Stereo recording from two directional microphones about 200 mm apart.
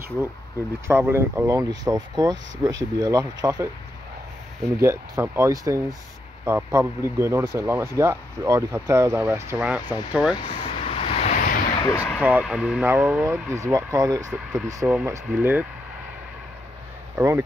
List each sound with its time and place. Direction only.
0.8 s speech: 10° right (ahead or behind)
4.8 s speech: 10° right (ahead or behind)
10.3 s a sound: 25° left (ahead or behind)
11.8 s speech: 15° left (ahead or behind)
12.2 s speech: 5° right (ahead or behind)
17.1 s speech: 15° right (ahead or behind)